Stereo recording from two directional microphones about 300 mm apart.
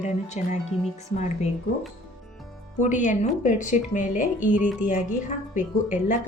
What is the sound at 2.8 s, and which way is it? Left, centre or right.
A woman's voice, left.